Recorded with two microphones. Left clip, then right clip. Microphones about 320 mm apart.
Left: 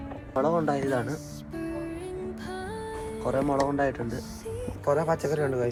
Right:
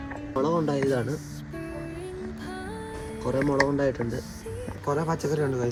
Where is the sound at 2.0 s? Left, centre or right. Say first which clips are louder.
Left 1 dB; centre.